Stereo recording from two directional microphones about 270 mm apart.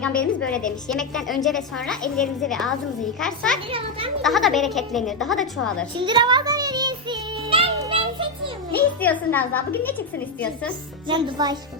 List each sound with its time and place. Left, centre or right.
0.0 s a woman's voice: centre
3.7 s a child's voice: centre
4.2 s a woman's voice: centre
6.0 s music: centre
8.7 s a child's voice: centre
11.1 s speech: centre